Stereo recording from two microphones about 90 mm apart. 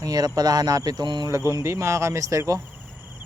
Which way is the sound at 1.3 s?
35° right (ahead or behind).